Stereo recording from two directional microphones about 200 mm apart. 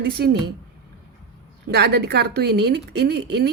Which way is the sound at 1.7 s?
55° right (ahead or behind).